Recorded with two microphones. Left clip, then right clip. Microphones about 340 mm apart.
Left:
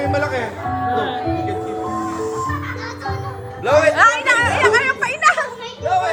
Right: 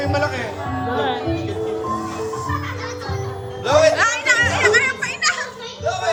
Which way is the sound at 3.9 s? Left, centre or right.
Centre.